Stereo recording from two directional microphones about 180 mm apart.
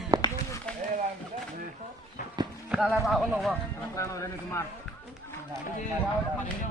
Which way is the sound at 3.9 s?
15° left (ahead or behind).